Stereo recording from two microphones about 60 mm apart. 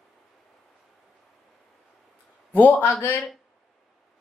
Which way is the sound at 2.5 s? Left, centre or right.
Left.